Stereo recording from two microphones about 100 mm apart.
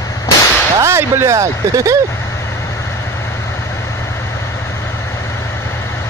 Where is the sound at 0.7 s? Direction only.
25° right (ahead or behind).